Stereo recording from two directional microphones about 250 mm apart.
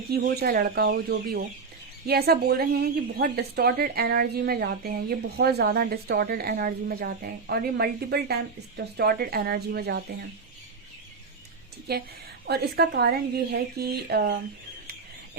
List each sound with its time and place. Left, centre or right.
0.1 s a woman's voice: right
11.9 s a woman's voice: right